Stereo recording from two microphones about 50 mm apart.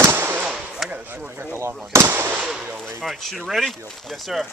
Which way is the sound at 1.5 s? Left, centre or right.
Right.